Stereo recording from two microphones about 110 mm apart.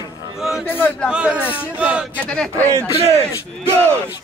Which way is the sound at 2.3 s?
10° left (ahead or behind).